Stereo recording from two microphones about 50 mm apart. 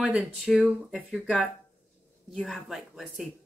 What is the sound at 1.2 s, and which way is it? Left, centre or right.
Speech, centre.